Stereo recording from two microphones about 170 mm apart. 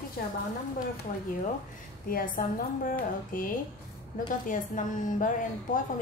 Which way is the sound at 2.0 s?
55° left (ahead or behind).